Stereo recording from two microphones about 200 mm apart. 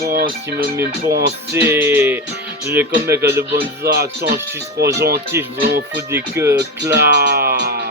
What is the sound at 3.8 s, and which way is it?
Speech, 50° right (ahead or behind).